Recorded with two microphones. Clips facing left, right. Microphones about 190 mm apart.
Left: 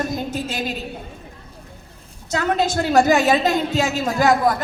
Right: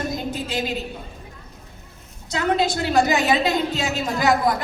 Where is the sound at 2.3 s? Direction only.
45° left (ahead or behind).